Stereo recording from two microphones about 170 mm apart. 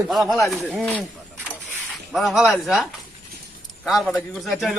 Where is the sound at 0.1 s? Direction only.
Centre (ahead or behind).